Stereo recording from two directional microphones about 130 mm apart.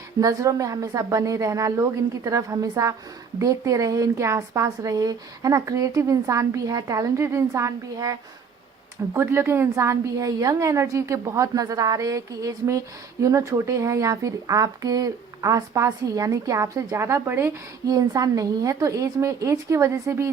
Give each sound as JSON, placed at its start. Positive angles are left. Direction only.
{"t": 0.2, "sound": "a woman's voice", "side_deg": -25}
{"t": 9.1, "sound": "a woman's voice", "side_deg": -20}